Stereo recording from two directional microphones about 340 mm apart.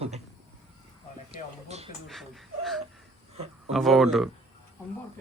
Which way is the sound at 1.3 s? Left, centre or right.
Centre.